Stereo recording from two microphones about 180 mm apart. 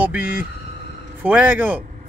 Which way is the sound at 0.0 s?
10° right (ahead or behind).